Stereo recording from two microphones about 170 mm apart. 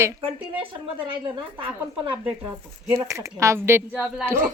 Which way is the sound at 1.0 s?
30° right (ahead or behind).